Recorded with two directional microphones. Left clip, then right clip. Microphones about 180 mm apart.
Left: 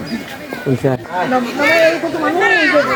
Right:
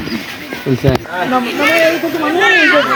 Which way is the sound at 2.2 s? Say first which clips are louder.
Right 4 dB; 40° right (ahead or behind).